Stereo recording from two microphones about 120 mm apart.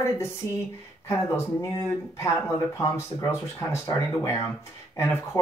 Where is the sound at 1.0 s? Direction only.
25° left (ahead or behind).